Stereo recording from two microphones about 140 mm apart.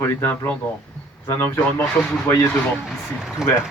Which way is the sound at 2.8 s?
5° right (ahead or behind).